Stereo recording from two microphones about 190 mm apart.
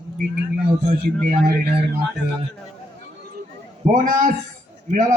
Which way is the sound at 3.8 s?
40° right (ahead or behind).